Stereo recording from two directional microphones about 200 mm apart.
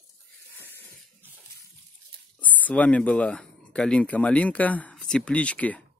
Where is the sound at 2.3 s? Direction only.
10° left (ahead or behind).